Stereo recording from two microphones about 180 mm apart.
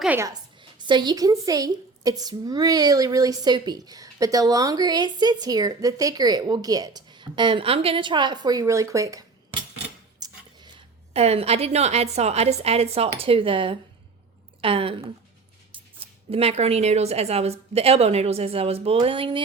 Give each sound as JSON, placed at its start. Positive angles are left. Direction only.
{"t": 0.0, "sound": "a woman's voice", "side_deg": -10}
{"t": 0.3, "sound": "a woman's voice", "side_deg": -25}
{"t": 16.3, "sound": "a woman's voice", "side_deg": -35}